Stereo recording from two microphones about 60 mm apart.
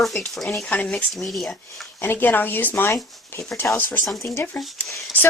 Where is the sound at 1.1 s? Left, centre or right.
Centre.